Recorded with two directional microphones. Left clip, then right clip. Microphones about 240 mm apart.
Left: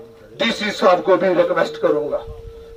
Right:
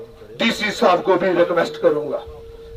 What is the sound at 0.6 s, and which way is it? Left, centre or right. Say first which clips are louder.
A man's voice: left 1 dB; left.